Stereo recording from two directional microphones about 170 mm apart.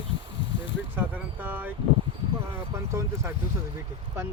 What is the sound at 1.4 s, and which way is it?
Speech, 10° right (ahead or behind).